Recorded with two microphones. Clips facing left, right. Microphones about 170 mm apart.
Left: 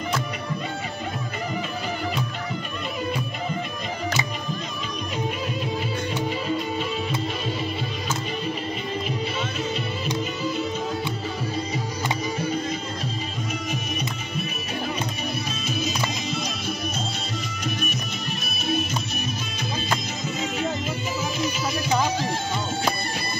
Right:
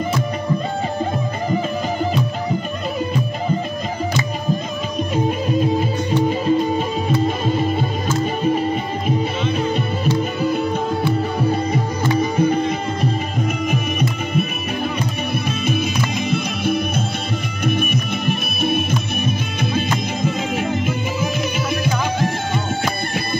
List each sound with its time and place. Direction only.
5.1 s music: 45° right (ahead or behind)
11.4 s music: 55° right (ahead or behind)
15.6 s music: 55° right (ahead or behind)